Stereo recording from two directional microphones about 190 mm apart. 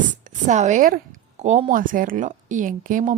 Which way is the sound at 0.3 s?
40° right (ahead or behind).